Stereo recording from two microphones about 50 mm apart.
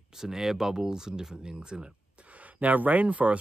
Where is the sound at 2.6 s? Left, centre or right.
Right.